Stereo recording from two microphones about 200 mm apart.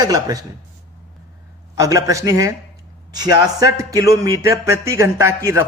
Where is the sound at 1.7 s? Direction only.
15° right (ahead or behind).